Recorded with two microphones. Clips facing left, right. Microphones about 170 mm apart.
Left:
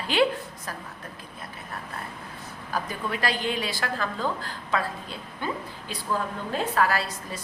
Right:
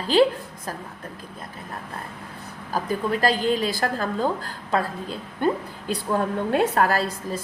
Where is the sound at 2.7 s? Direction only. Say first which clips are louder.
Right 6 dB; 40° right (ahead or behind).